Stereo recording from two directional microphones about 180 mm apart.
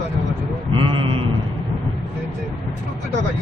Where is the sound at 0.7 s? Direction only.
30° right (ahead or behind).